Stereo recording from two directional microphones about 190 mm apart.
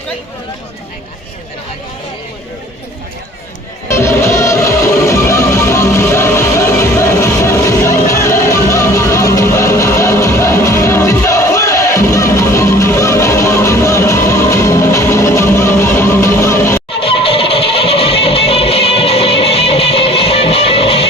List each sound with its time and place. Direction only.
3.8 s music: 15° left (ahead or behind)
17.0 s music: 30° left (ahead or behind)